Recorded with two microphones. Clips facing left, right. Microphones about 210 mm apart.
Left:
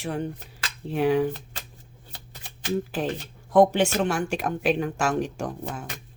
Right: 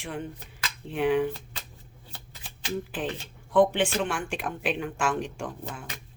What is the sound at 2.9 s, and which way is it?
Speech, 40° left (ahead or behind).